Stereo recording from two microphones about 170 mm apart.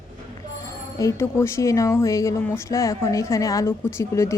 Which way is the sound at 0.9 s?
15° left (ahead or behind).